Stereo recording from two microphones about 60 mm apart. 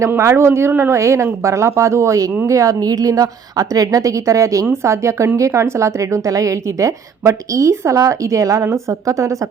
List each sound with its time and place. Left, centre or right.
0.2 s a woman's voice: right